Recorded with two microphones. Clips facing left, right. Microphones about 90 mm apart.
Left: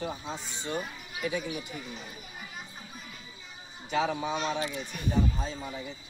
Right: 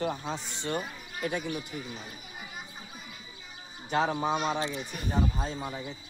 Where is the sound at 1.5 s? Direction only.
Centre (ahead or behind).